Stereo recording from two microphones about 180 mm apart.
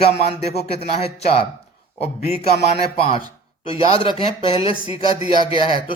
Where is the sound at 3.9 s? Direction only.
30° left (ahead or behind).